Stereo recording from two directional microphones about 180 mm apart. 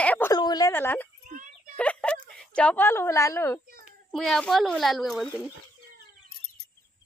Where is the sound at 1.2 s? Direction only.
45° right (ahead or behind).